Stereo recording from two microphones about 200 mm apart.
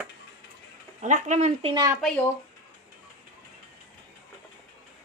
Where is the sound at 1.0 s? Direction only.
35° right (ahead or behind).